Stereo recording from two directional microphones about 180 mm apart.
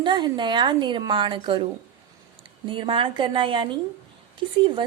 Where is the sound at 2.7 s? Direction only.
30° right (ahead or behind).